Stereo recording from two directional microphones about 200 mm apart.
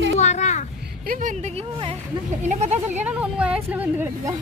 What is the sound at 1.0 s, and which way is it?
Speech, 40° right (ahead or behind).